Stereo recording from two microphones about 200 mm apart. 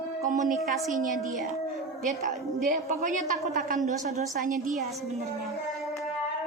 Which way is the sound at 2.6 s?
40° right (ahead or behind).